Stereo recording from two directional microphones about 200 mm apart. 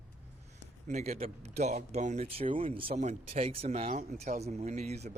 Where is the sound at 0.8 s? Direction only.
35° right (ahead or behind).